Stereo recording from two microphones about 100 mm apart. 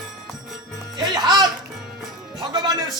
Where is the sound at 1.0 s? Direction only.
45° right (ahead or behind).